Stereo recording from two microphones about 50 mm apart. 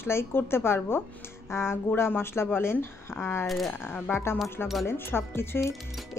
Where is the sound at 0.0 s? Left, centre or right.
Left.